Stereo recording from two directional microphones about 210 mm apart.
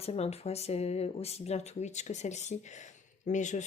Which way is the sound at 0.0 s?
30° left (ahead or behind).